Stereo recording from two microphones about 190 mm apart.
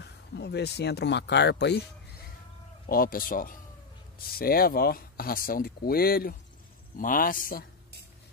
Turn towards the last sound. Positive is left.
turn(degrees=45)  # may be behind; listen again after turning